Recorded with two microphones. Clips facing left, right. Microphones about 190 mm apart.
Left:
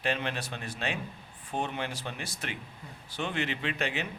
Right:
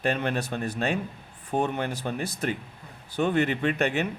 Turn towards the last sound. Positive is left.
turn(degrees=-50)  # may be behind; listen again after turning